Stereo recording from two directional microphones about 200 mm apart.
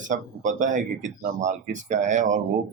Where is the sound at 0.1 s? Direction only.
40° right (ahead or behind).